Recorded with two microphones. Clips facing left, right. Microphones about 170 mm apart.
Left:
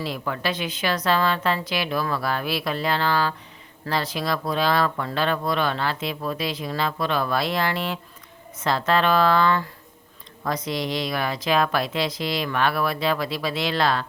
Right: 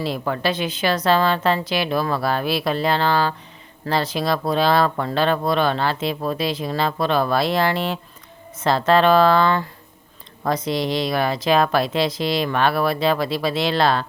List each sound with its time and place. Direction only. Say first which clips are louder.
0.0 s speech: right 5 dB; 30° right (ahead or behind)